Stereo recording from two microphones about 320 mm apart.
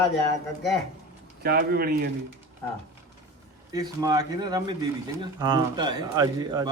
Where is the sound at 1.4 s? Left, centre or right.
Right.